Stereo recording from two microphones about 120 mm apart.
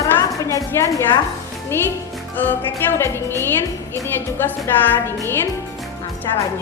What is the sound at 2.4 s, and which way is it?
A woman's voice, 15° left (ahead or behind).